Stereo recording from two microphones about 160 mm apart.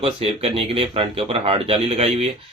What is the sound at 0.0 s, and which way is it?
Speech, 35° right (ahead or behind).